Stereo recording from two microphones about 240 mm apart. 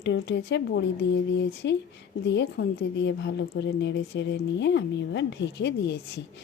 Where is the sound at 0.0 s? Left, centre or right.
Left.